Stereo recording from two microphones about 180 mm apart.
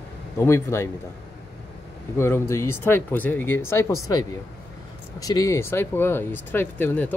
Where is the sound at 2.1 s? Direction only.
15° left (ahead or behind).